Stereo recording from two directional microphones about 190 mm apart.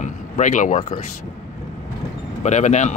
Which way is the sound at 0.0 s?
40° left (ahead or behind).